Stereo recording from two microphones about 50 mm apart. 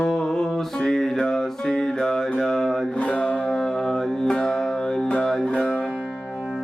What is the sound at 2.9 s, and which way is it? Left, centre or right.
Speech, left.